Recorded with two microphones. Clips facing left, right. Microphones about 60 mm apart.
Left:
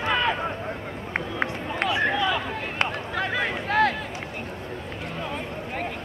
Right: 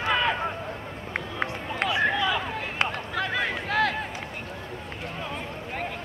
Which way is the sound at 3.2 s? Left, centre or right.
Left.